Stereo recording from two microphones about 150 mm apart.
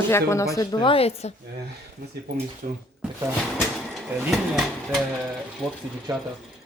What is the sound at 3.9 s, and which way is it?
Speech, centre (ahead or behind).